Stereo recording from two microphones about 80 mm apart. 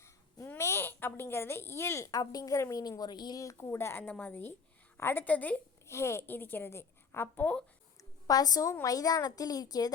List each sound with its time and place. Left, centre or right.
0.4 s a sound: left
2.0 s a woman's voice: left
3.0 s a woman's voice: left
3.4 s a woman's voice: left; by 5.6 s centre
5.9 s a woman's voice: left
8.3 s a woman's voice: left